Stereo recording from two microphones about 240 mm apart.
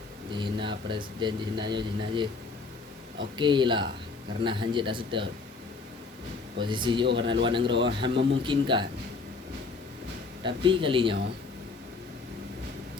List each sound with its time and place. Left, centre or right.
0.3 s a sound: centre
0.9 s speech: centre
6.6 s speech: centre
7.7 s a man's voice: right
7.9 s speech: centre
10.4 s speech: right